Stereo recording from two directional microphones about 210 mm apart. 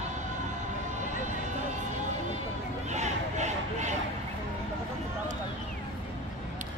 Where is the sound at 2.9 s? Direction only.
35° right (ahead or behind).